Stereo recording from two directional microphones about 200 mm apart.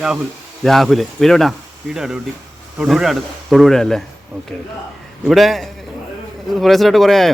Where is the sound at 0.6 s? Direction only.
Centre (ahead or behind).